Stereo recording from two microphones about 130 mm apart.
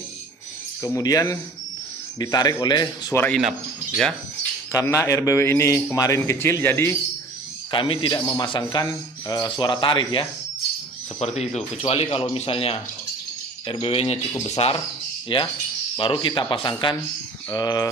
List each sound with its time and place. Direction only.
0.8 s speech: 25° left (ahead or behind)
3.3 s speech: centre (ahead or behind)
4.7 s speech: 25° left (ahead or behind)
7.7 s speech: 40° left (ahead or behind)
11.1 s speech: 55° left (ahead or behind); by 17.8 s 30° left (ahead or behind)